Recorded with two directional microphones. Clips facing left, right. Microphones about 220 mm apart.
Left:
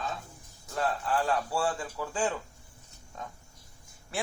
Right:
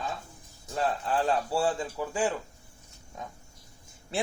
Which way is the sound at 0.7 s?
20° right (ahead or behind).